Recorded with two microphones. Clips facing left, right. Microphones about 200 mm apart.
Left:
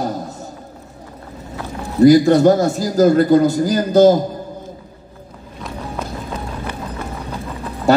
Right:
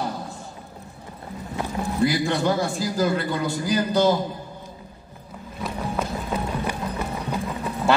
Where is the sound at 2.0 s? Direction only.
40° left (ahead or behind).